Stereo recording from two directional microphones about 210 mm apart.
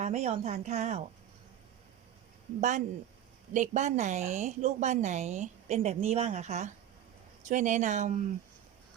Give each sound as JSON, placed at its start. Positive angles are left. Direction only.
{"t": 0.0, "sound": "speech", "side_deg": -30}
{"t": 2.6, "sound": "speech", "side_deg": -35}